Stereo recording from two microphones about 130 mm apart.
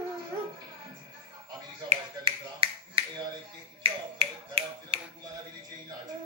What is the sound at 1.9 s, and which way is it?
Finger snapping, 50° right (ahead or behind).